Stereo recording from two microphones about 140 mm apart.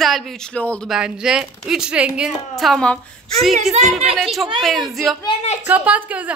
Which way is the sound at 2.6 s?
5° left (ahead or behind).